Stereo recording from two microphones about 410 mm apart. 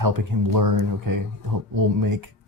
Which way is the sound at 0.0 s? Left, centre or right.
Right.